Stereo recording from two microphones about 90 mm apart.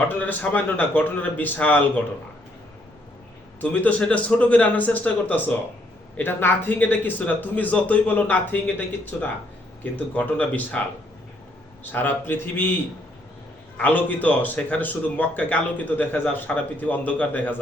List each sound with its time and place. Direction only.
0.2 s a man's voice: 20° left (ahead or behind)
3.6 s a man's voice: 15° left (ahead or behind)
13.7 s a man's voice: 20° left (ahead or behind)